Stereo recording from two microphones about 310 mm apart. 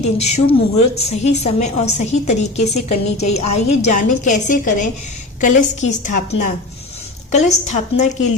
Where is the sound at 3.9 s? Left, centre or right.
Left.